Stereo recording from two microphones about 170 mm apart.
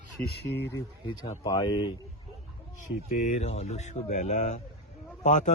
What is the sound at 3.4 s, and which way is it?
Speech, 40° left (ahead or behind).